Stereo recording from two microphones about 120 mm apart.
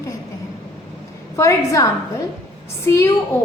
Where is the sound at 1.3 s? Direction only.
25° left (ahead or behind).